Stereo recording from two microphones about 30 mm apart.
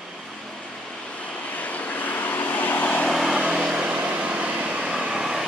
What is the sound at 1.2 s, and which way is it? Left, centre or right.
Vehicle, left.